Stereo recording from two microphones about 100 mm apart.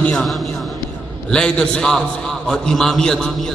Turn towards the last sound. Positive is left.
turn(degrees=5)  # may be behind; listen again after turning